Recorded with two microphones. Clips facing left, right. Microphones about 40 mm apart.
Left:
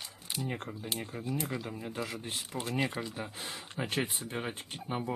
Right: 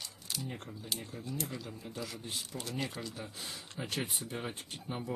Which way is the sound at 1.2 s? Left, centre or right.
Left.